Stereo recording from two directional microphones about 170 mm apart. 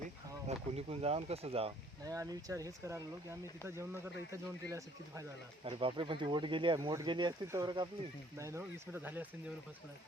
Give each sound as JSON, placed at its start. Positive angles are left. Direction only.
{"t": 0.4, "sound": "speech", "side_deg": -35}
{"t": 2.0, "sound": "speech", "side_deg": -20}
{"t": 5.6, "sound": "speech", "side_deg": -30}